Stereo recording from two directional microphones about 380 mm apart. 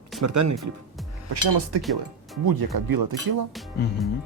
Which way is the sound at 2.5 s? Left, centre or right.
Right.